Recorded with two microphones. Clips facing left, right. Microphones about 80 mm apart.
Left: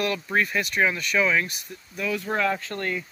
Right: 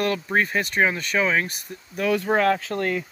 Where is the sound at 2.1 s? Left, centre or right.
Right.